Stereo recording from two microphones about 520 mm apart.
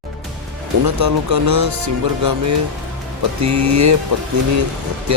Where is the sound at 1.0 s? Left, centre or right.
Right.